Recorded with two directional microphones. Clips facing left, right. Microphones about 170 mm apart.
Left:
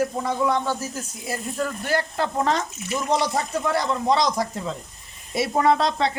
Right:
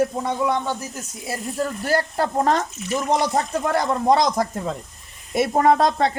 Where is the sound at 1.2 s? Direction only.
30° right (ahead or behind).